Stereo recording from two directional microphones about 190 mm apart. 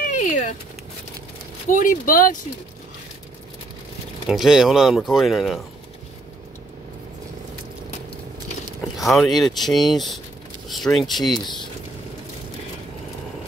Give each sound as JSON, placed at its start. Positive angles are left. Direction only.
{"t": 0.0, "sound": "a sound", "side_deg": 40}
{"t": 1.7, "sound": "speech", "side_deg": 45}
{"t": 4.3, "sound": "speech", "side_deg": 0}
{"t": 8.9, "sound": "speech", "side_deg": 0}
{"t": 11.4, "sound": "speech", "side_deg": 25}